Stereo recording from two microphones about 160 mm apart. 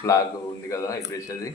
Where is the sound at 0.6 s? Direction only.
20° left (ahead or behind).